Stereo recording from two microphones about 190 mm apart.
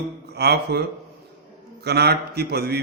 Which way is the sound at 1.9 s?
60° right (ahead or behind).